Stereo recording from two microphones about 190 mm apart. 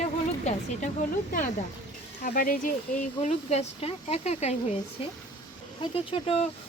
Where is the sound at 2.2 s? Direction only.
50° left (ahead or behind).